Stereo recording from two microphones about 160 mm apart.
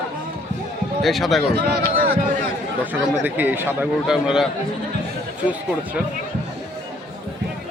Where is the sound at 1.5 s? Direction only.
70° right (ahead or behind).